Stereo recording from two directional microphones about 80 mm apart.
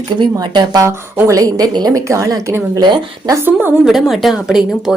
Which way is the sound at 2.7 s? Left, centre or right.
Right.